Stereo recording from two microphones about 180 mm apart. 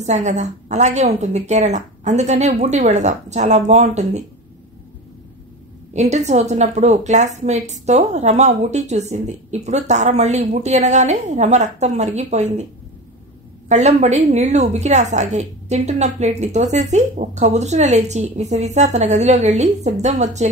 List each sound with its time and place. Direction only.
0.0 s a woman's voice: 40° right (ahead or behind)
5.9 s a woman's voice: 40° right (ahead or behind)
13.7 s a woman's voice: 40° right (ahead or behind)